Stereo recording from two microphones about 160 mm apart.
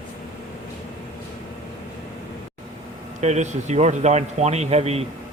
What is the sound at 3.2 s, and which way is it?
Speech, 45° right (ahead or behind).